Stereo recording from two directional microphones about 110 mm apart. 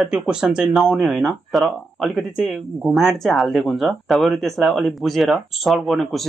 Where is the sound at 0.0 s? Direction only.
5° right (ahead or behind).